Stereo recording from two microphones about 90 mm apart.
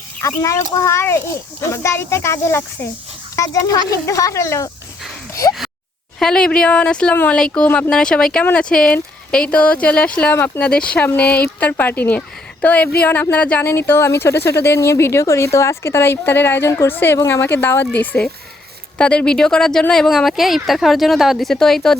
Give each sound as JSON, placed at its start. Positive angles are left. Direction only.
{"t": 0.2, "sound": "a child's voice", "side_deg": 35}
{"t": 6.1, "sound": "speech", "side_deg": 5}
{"t": 10.3, "sound": "speech", "side_deg": 25}
{"t": 10.6, "sound": "speech", "side_deg": 10}